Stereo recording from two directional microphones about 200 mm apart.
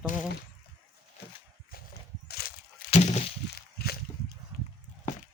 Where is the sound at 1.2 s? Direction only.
55° left (ahead or behind).